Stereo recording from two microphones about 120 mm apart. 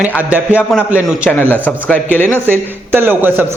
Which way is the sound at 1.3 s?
5° left (ahead or behind).